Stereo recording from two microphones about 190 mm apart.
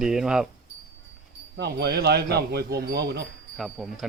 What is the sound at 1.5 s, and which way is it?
Speech, 60° right (ahead or behind).